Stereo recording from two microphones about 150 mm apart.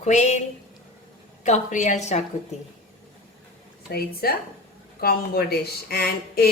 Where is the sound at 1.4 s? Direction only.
55° left (ahead or behind).